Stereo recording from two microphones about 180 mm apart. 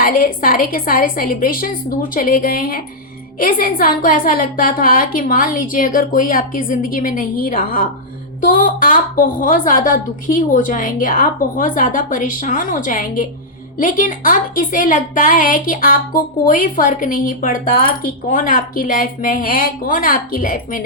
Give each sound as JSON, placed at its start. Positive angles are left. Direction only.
{"t": 0.0, "sound": "a woman's voice", "side_deg": 50}